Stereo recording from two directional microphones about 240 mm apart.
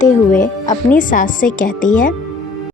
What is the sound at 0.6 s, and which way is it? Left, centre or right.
Speech, centre.